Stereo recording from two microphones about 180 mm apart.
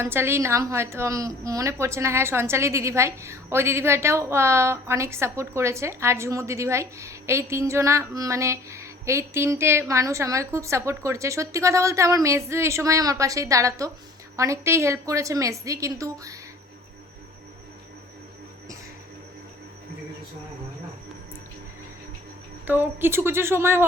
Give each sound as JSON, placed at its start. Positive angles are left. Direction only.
{"t": 0.0, "sound": "a woman's voice", "side_deg": -15}
{"t": 22.6, "sound": "a woman's voice", "side_deg": -10}